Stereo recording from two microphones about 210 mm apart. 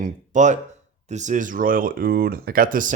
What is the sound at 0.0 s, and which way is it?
Speech, 35° right (ahead or behind).